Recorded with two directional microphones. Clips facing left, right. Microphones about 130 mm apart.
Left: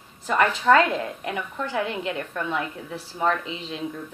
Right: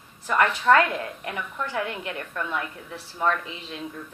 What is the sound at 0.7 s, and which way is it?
A woman's voice, 25° left (ahead or behind).